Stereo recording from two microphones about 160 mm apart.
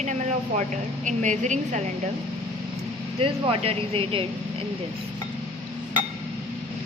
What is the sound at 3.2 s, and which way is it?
Speech, 35° right (ahead or behind).